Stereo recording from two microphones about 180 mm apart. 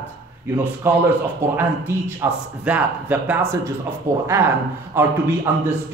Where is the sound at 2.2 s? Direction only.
15° right (ahead or behind).